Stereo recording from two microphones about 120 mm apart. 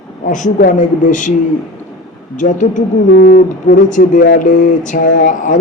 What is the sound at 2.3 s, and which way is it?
Speech, 90° left.